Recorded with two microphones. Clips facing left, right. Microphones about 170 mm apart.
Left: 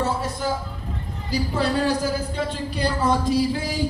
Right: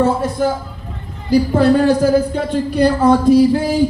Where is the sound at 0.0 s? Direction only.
55° right (ahead or behind).